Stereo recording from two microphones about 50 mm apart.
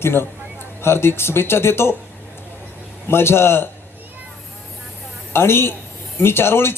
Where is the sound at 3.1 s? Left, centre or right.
Left.